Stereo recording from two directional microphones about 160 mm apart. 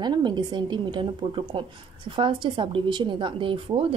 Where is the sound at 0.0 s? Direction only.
30° right (ahead or behind).